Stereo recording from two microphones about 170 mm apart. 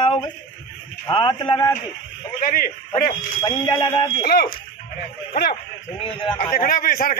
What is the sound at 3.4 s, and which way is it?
Speech, 25° left (ahead or behind).